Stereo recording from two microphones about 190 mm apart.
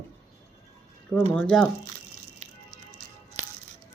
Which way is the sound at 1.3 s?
5° left (ahead or behind).